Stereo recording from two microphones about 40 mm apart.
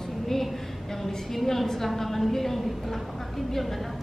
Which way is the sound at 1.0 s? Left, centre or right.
Centre.